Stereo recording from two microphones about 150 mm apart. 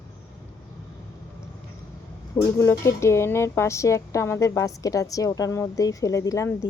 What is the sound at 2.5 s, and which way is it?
A woman's voice, 15° left (ahead or behind).